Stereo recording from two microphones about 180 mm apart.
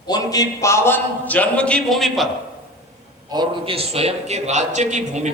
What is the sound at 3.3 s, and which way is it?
A man's voice, 25° right (ahead or behind).